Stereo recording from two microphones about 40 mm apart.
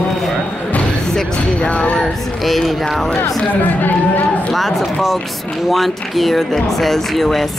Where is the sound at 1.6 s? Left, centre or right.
Left.